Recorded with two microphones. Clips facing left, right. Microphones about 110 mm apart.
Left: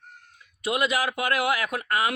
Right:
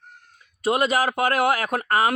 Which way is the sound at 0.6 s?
40° right (ahead or behind).